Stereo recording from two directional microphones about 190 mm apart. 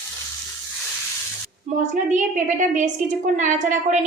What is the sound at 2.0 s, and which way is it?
A woman's voice, 40° right (ahead or behind).